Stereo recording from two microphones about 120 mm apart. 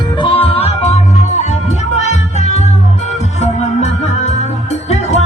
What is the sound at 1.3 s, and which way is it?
Music, 75° left (ahead or behind).